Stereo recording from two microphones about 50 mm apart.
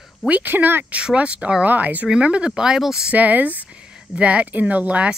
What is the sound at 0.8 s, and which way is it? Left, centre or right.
Speech, right.